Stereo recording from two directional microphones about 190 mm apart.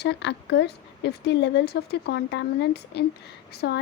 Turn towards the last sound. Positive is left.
turn(degrees=60)  # may be behind; listen again after turning